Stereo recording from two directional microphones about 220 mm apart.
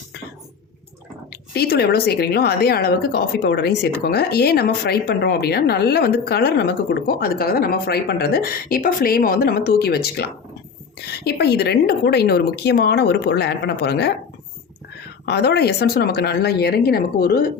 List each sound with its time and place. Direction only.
1.5 s a woman's voice: 45° left (ahead or behind)
15.3 s a woman's voice: 45° left (ahead or behind)